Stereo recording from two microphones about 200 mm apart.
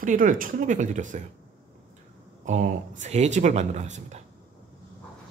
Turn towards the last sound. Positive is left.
turn(degrees=-35)  # may be behind; listen again after turning